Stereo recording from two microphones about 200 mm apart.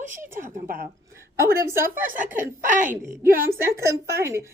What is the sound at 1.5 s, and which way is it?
Speech, 10° right (ahead or behind).